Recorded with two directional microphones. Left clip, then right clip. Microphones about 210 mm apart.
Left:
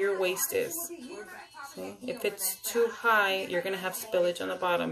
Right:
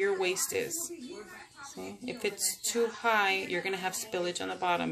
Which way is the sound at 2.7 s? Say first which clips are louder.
Left 3 dB; 30° right (ahead or behind).